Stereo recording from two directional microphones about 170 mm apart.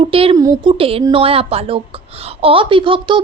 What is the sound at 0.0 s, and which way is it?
A woman's voice, 35° right (ahead or behind).